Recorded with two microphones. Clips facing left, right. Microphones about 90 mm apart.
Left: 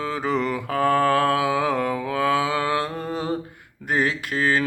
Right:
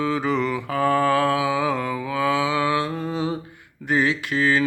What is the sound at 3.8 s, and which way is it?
Speech, 45° left (ahead or behind).